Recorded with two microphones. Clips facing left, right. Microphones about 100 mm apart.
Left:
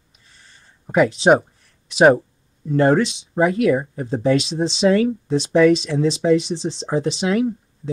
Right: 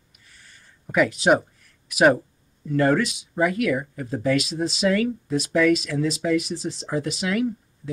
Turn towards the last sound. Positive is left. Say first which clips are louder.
# left 4 dB
turn(degrees=25)  # may be behind; listen again after turning